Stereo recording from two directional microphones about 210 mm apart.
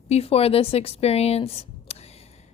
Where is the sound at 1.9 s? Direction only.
30° left (ahead or behind).